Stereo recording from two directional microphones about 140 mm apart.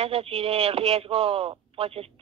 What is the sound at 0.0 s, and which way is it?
A woman's voice, 45° right (ahead or behind).